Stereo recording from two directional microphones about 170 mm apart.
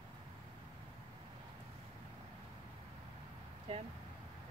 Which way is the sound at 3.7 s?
35° right (ahead or behind).